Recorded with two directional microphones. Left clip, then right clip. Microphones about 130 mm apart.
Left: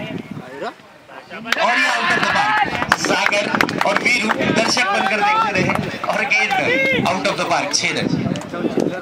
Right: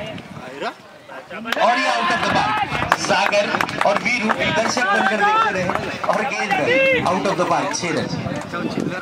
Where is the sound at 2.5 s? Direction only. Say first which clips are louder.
Left 2 dB; 35° left (ahead or behind).